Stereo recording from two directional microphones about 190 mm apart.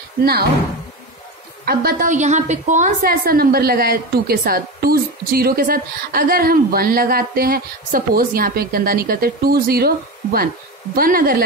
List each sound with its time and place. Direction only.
1.7 s a woman's voice: 55° right (ahead or behind)